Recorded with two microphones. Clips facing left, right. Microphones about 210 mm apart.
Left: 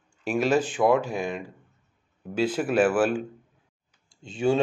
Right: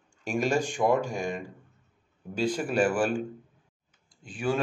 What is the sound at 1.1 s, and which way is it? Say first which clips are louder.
Speech: left 2 dB; 45° right (ahead or behind).